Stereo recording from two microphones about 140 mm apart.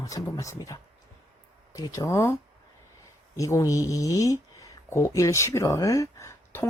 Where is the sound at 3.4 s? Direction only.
25° left (ahead or behind).